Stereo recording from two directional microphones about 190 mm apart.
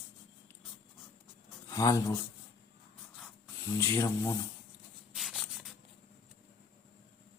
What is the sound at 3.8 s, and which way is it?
Speech, 15° left (ahead or behind).